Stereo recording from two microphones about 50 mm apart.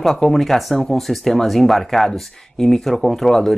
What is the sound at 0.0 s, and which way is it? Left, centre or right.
Speech, centre.